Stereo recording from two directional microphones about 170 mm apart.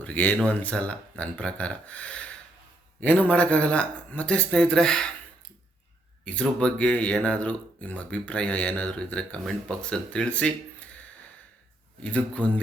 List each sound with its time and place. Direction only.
0.0 s speech: 10° left (ahead or behind)
6.2 s speech: 5° left (ahead or behind)
12.0 s speech: 10° left (ahead or behind)